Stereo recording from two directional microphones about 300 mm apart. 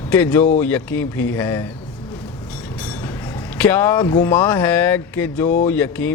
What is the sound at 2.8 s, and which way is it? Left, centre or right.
Train, centre.